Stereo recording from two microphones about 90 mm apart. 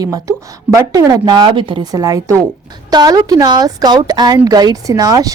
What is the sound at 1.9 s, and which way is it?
A woman's voice, 40° right (ahead or behind).